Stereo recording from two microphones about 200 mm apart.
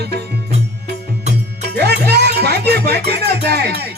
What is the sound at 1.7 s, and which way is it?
Music, 55° right (ahead or behind).